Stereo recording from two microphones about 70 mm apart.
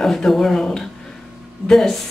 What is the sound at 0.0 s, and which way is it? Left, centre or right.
Speech, centre.